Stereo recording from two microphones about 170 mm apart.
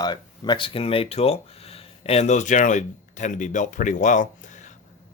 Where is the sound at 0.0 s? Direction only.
25° left (ahead or behind); by 4.3 s 45° left (ahead or behind).